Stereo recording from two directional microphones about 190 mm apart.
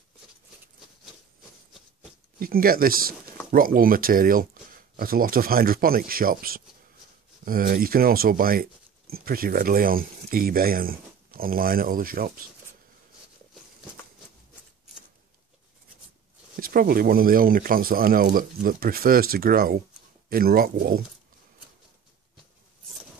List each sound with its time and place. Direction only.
2.3 s speech: 50° right (ahead or behind)
16.5 s speech: 50° right (ahead or behind)